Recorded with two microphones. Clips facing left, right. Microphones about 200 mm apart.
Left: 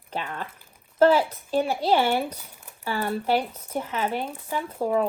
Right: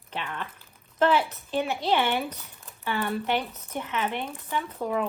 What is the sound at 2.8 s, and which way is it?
A woman's voice, 35° left (ahead or behind).